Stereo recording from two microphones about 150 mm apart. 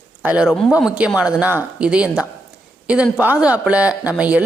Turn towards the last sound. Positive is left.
turn(degrees=-10)  # may be behind; listen again after turning